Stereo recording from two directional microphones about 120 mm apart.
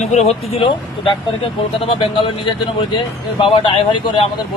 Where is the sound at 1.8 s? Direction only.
45° left (ahead or behind).